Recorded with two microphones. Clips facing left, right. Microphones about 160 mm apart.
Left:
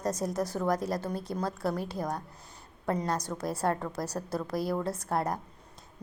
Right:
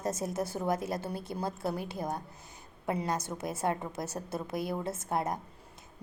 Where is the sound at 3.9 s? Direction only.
25° right (ahead or behind).